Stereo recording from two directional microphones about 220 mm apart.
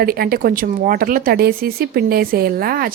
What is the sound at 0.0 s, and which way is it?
Speech, 45° right (ahead or behind).